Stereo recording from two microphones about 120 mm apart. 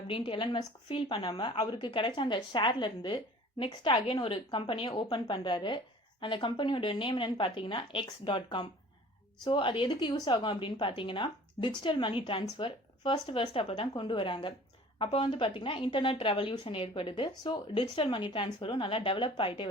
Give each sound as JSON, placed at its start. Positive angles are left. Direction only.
{"t": 0.1, "sound": "a woman's voice", "side_deg": 45}